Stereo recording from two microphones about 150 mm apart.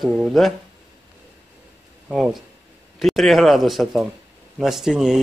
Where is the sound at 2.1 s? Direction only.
Centre (ahead or behind).